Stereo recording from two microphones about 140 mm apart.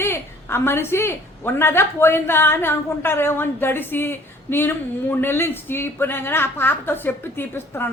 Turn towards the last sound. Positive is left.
turn(degrees=15)  # may be behind; listen again after turning